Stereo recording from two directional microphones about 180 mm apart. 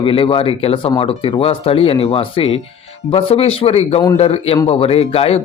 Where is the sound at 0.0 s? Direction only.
30° left (ahead or behind).